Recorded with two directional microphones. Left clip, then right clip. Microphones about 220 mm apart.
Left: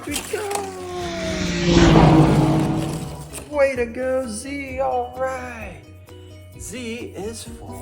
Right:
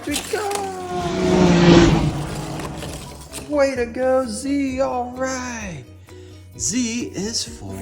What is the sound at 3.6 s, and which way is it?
Speech, 50° right (ahead or behind).